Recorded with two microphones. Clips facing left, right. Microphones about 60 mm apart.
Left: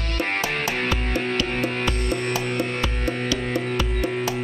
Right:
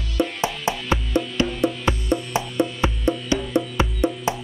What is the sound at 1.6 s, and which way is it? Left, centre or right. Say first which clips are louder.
Music: right 2 dB; right.